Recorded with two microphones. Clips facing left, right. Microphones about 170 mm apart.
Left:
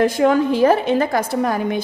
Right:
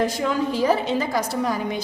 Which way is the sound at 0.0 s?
55° left (ahead or behind).